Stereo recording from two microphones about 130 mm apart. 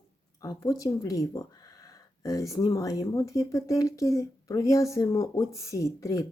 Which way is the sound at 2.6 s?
25° left (ahead or behind).